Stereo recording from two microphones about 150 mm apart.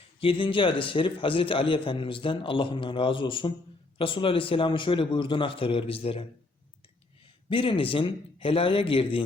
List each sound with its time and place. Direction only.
0.2 s a man's voice: 35° left (ahead or behind)
7.5 s a man's voice: 35° left (ahead or behind)